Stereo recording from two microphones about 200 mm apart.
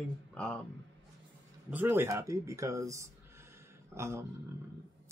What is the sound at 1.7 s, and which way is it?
Speech, 10° right (ahead or behind).